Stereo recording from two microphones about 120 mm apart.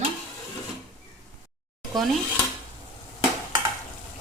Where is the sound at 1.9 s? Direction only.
Centre (ahead or behind).